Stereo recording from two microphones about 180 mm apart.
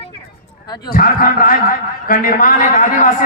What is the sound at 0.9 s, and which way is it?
A man's voice, 55° left (ahead or behind).